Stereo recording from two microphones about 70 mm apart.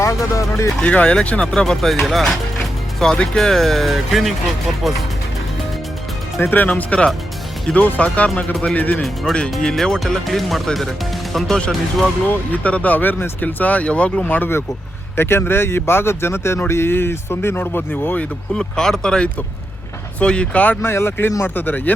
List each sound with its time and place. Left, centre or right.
0.0 s speech: left
0.8 s speech: centre
6.4 s speech: left
9.0 s speech: centre
12.3 s speech: left
18.5 s speech: centre
20.8 s speech: left